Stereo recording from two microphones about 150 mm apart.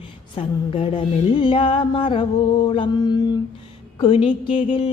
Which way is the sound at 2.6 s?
30° left (ahead or behind).